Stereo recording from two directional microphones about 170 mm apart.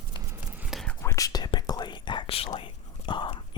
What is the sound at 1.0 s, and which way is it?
Whispering, 20° left (ahead or behind).